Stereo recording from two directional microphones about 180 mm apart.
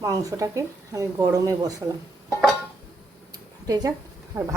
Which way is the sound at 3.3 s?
20° right (ahead or behind).